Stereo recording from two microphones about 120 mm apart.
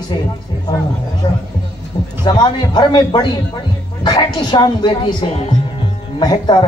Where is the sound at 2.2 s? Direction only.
40° left (ahead or behind).